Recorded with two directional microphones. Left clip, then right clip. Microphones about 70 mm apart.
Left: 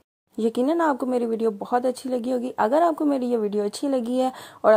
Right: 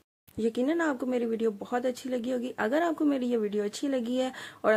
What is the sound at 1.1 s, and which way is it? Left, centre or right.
Speech, left.